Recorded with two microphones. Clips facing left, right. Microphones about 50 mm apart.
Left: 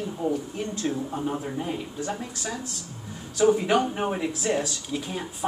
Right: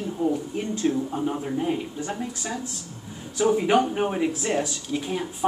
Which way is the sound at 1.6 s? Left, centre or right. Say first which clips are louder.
Right 3 dB; centre.